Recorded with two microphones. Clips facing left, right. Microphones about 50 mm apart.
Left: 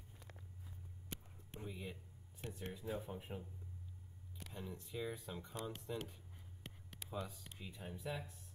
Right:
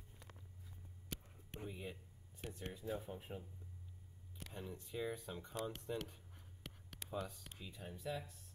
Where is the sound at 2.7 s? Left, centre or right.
Centre.